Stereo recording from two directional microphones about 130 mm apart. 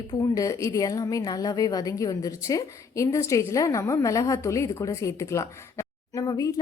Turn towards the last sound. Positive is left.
turn(degrees=25)  # may be behind; listen again after turning